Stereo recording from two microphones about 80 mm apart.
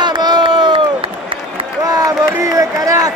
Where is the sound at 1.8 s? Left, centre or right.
Right.